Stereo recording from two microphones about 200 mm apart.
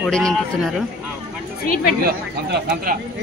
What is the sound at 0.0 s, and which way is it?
Speech, 5° left (ahead or behind).